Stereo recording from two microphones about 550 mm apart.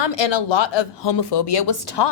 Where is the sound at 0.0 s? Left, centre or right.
Left.